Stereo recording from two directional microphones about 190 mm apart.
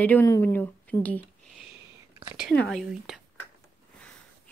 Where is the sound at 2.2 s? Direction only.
5° right (ahead or behind).